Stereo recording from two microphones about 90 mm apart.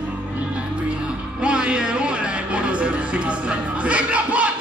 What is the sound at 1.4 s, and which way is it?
Music, 10° right (ahead or behind).